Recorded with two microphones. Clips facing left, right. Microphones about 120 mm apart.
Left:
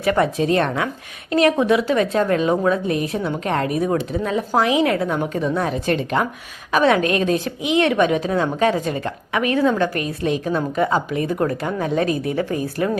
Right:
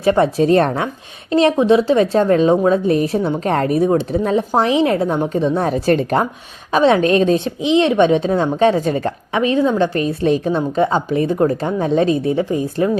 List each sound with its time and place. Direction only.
0.0 s a woman's voice: 30° right (ahead or behind)
5.7 s a woman's voice: 40° right (ahead or behind)
6.7 s a woman's voice: 25° right (ahead or behind)